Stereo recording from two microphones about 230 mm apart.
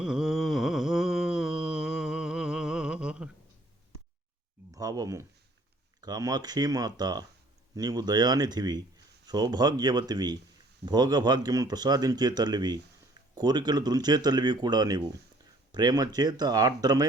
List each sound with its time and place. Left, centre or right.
0.0 s humming: centre
4.7 s a sound: centre
6.0 s speech: centre